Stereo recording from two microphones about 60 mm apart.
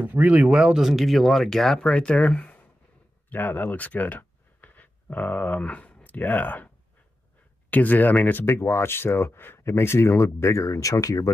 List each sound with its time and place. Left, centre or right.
0.0 s speech: right
0.5 s speech: centre; by 2.7 s left
3.3 s speech: left
7.7 s speech: left